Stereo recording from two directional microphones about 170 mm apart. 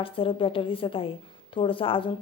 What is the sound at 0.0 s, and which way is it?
Speech, 30° left (ahead or behind).